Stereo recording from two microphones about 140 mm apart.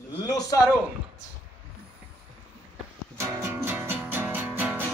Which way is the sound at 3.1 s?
15° right (ahead or behind).